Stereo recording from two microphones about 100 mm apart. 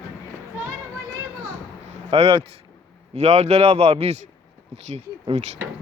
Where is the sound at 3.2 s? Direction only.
90° right.